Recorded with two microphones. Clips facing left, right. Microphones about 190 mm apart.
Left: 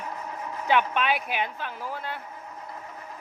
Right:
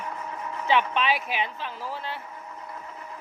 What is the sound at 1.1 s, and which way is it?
Speech, 55° left (ahead or behind).